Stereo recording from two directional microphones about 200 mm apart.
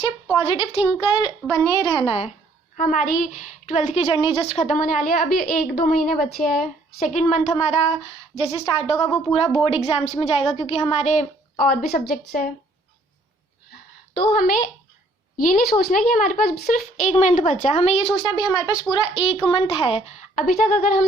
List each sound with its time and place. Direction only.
0.0 s a child's voice: 25° left (ahead or behind)
2.7 s a woman's voice: 45° left (ahead or behind)
11.7 s a woman's voice: 45° left (ahead or behind)
15.4 s a woman's voice: 45° left (ahead or behind)
18.1 s a child's voice: 20° left (ahead or behind); by 21.0 s 45° left (ahead or behind)